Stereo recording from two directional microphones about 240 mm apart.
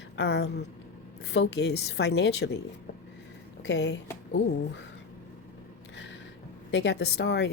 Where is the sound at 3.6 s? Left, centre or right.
Left.